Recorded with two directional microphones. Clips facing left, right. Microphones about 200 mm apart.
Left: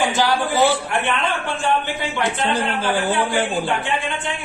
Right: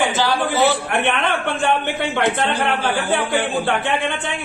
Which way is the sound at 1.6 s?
60° right (ahead or behind).